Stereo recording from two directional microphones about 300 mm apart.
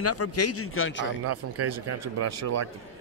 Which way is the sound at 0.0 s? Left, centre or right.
Left.